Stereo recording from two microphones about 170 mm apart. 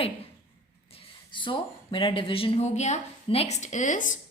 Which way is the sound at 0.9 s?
30° left (ahead or behind).